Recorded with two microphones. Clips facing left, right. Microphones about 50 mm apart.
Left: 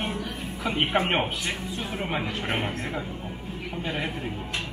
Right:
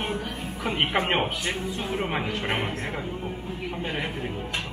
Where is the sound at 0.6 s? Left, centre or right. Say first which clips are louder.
Even; right.